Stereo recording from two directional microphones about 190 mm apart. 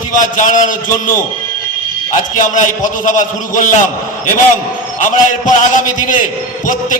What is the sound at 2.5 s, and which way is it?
A man's voice, 45° left (ahead or behind).